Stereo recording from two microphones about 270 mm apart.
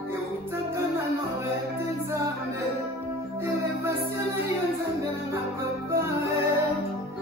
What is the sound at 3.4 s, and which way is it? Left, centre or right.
Music, centre.